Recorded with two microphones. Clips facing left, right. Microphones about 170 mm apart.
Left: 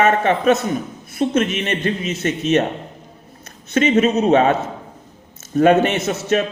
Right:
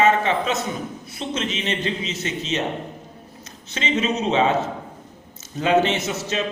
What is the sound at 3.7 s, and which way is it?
Speech, 55° left (ahead or behind).